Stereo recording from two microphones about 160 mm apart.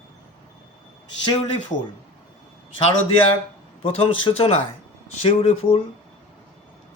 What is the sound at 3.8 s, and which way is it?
Speech, 35° left (ahead or behind).